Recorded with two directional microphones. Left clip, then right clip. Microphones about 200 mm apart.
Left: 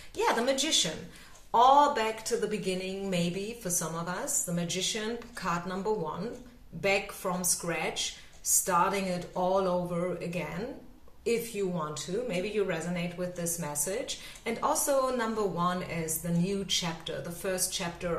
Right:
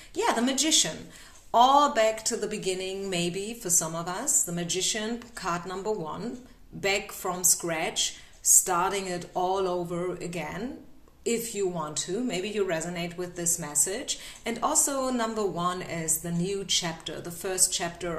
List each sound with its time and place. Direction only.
0.2 s speech: 50° right (ahead or behind)
7.4 s speech: 50° right (ahead or behind)